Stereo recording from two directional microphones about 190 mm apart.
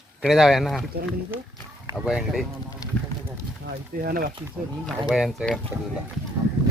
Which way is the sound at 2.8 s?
20° left (ahead or behind).